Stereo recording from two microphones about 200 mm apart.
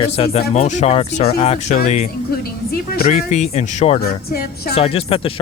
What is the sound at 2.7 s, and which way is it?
Speech, 50° left (ahead or behind).